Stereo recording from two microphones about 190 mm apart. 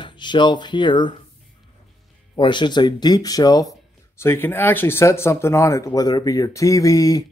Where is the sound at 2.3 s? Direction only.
25° left (ahead or behind).